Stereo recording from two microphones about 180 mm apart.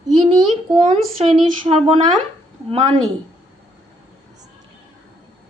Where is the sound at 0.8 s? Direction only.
35° right (ahead or behind).